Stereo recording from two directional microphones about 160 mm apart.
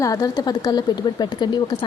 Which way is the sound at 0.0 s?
20° left (ahead or behind).